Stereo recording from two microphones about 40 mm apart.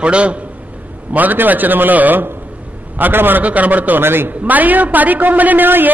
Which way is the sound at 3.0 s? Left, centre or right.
Right.